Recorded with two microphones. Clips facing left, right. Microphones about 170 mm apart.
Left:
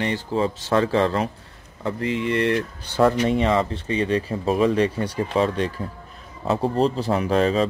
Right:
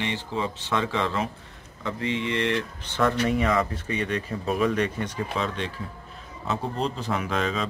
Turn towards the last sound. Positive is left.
turn(degrees=35)  # may be behind; listen again after turning